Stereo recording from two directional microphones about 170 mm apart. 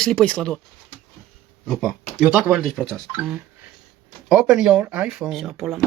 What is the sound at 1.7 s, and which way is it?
Speech, 5° left (ahead or behind).